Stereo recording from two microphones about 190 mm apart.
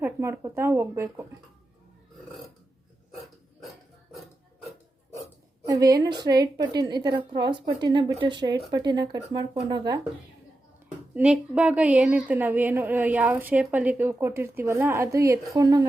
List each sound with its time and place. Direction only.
0.0 s a woman's voice: 15° right (ahead or behind)
5.6 s a woman's voice: 20° right (ahead or behind)
11.1 s a woman's voice: 5° right (ahead or behind)